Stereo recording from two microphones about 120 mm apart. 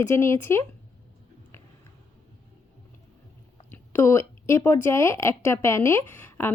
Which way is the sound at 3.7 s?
20° left (ahead or behind).